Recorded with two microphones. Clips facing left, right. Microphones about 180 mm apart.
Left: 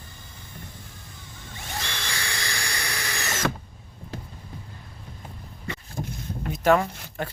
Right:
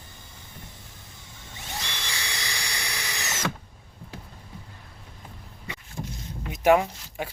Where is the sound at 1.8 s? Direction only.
20° right (ahead or behind).